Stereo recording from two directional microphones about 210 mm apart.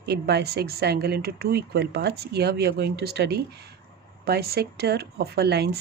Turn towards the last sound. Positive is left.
turn(degrees=-50)  # may be behind; listen again after turning